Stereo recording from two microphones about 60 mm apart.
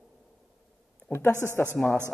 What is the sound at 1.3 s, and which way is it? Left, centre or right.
Speech, right.